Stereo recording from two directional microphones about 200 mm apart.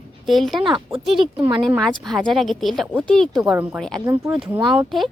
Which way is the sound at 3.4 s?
10° right (ahead or behind).